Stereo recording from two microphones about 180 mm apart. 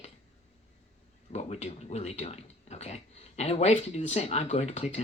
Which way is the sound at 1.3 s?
35° left (ahead or behind).